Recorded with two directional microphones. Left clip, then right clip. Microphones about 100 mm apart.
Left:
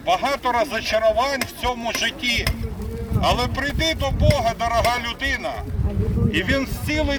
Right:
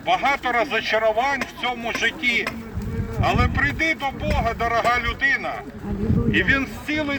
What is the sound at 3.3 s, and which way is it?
Speech, 30° left (ahead or behind).